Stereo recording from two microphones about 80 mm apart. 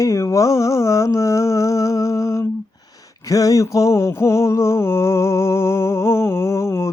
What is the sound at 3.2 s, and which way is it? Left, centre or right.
Mantra, left.